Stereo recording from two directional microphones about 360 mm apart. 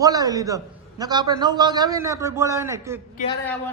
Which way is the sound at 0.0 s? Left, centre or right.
Centre.